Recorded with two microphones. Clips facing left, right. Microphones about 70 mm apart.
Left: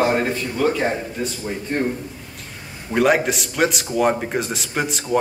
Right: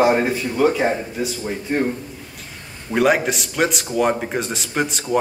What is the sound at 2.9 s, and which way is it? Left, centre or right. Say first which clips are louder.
Speech: even; centre.